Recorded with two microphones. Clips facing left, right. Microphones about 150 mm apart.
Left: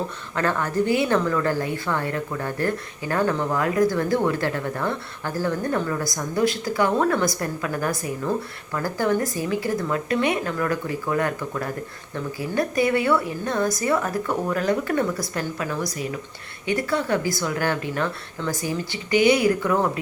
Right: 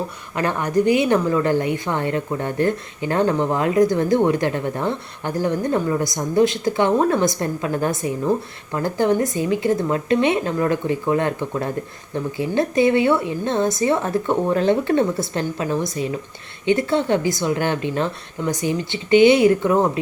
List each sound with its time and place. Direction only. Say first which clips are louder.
0.3 s a woman's voice: right 3 dB; 15° right (ahead or behind)